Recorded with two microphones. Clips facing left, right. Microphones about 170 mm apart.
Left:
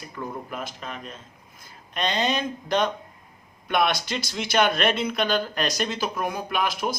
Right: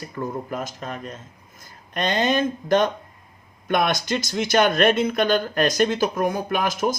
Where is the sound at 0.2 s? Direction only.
45° right (ahead or behind).